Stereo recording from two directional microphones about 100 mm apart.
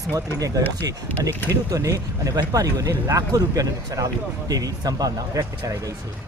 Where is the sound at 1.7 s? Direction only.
35° right (ahead or behind).